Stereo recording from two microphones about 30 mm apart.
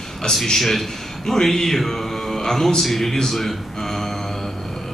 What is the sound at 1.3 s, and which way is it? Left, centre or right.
Mantra, centre.